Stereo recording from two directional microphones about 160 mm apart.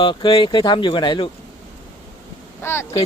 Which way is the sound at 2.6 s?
15° left (ahead or behind).